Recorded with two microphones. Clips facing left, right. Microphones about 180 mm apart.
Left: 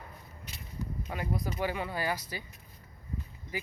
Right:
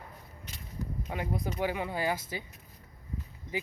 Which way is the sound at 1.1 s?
20° right (ahead or behind).